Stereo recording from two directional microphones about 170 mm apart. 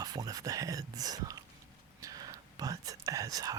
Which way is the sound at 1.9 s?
20° right (ahead or behind).